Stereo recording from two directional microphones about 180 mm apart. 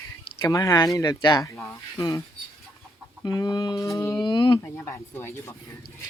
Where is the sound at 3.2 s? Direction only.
20° left (ahead or behind).